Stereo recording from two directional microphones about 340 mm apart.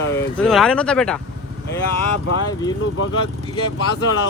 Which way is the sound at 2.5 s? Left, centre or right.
Centre.